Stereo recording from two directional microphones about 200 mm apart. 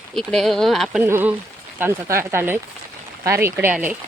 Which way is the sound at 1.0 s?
10° right (ahead or behind).